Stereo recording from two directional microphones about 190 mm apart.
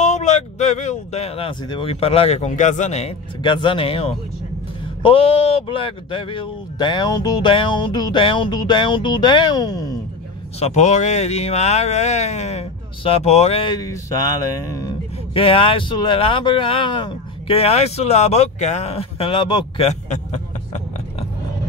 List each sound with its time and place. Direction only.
0.0 s speech: 40° left (ahead or behind); by 9.9 s 20° left (ahead or behind)
10.6 s speech: 35° left (ahead or behind)
13.7 s a sound: 20° left (ahead or behind)
15.3 s speech: 30° left (ahead or behind)